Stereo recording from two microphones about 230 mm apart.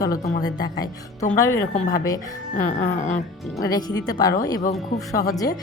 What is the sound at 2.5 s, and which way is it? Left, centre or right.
Speech, left.